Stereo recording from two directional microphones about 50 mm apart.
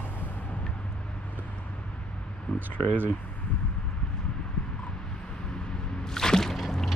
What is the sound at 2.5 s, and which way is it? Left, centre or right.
Speech, left.